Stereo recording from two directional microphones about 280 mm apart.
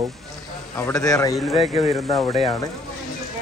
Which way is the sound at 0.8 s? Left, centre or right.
Centre.